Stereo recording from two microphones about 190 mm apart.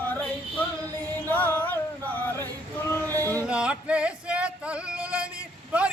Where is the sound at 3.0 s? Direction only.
15° right (ahead or behind).